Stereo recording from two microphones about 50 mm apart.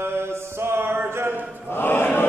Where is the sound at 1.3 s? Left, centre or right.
Right.